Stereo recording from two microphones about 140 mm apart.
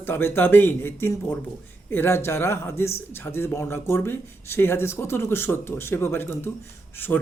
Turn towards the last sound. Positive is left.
turn(degrees=15)  # may be behind; listen again after turning